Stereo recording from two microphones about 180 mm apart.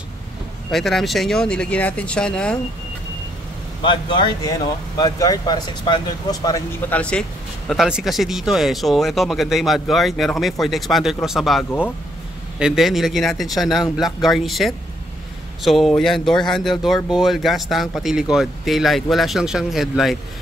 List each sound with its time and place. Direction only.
0.7 s speech: centre (ahead or behind)
3.8 s speech: 25° left (ahead or behind)
6.9 s speech: 5° left (ahead or behind)